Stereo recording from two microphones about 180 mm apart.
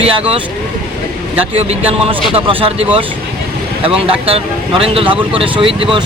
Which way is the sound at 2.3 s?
30° right (ahead or behind).